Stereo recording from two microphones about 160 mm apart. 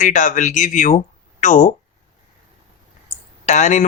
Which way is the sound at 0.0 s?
50° left (ahead or behind).